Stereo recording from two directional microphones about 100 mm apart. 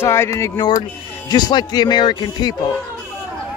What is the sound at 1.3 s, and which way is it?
Speech, 45° left (ahead or behind).